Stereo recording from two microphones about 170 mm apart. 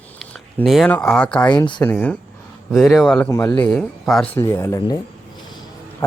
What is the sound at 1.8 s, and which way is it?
Speech, 10° left (ahead or behind).